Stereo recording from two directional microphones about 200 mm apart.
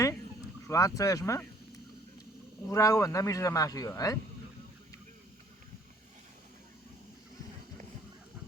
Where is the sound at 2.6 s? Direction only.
15° left (ahead or behind).